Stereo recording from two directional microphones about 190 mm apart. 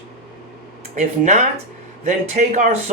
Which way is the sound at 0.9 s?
40° right (ahead or behind).